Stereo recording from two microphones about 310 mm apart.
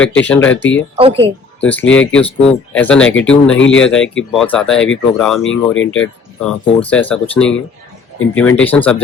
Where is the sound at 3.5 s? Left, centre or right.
Left.